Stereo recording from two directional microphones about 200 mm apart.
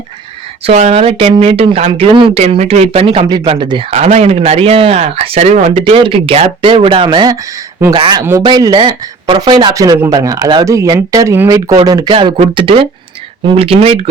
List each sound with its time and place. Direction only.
0.6 s speech: 35° right (ahead or behind)
3.9 s speech: 35° right (ahead or behind)